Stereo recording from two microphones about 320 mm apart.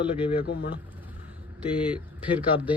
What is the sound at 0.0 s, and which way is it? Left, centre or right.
Speech, centre.